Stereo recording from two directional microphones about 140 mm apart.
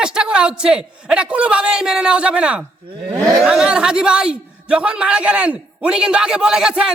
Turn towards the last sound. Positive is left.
turn(degrees=-5)  # may be behind; listen again after turning